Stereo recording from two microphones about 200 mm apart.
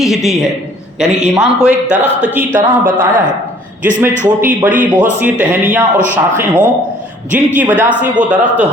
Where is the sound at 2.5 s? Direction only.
40° right (ahead or behind).